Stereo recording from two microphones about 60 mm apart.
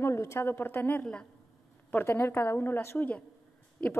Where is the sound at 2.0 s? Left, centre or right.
Left.